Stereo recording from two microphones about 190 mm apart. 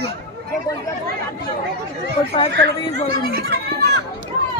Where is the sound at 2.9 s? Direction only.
55° right (ahead or behind).